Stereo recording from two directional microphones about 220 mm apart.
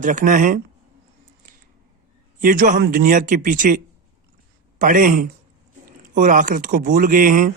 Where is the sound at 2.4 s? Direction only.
40° right (ahead or behind).